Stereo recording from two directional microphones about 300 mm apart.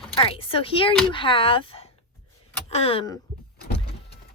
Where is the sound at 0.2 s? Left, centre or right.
Centre.